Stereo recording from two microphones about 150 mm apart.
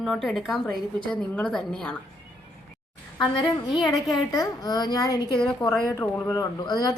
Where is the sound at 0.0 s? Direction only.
Centre (ahead or behind).